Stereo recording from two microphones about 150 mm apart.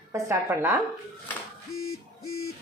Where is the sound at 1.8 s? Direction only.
80° left.